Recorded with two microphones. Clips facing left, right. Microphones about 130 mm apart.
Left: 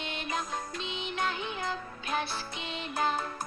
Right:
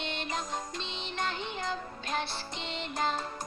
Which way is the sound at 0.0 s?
10° left (ahead or behind).